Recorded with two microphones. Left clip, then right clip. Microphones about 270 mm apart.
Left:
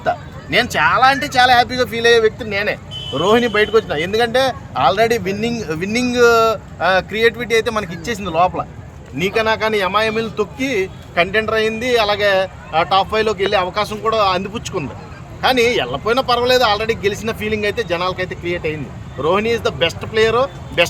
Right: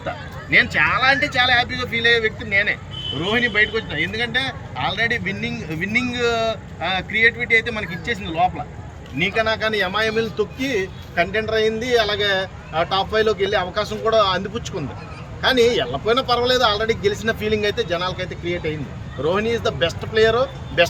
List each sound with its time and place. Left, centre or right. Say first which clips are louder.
0.5 s speech: left 2 dB; centre